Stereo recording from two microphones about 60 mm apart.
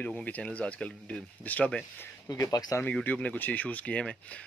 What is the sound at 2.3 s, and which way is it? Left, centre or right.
Speech, left.